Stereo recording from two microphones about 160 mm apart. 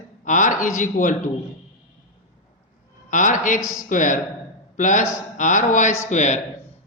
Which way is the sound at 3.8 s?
55° left (ahead or behind).